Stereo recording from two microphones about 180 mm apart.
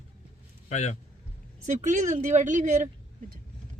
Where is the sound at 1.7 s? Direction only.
45° right (ahead or behind).